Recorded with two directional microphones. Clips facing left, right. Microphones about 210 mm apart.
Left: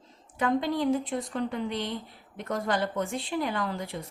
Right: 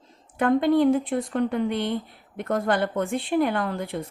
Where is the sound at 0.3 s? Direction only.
60° right (ahead or behind).